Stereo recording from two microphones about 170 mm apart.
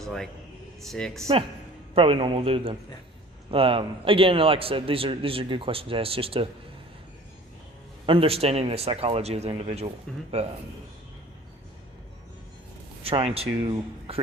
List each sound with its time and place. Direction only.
0.0 s a man's voice: centre (ahead or behind)
2.0 s a man's voice: 35° right (ahead or behind)
8.0 s a man's voice: 30° right (ahead or behind)
13.0 s a man's voice: 35° right (ahead or behind)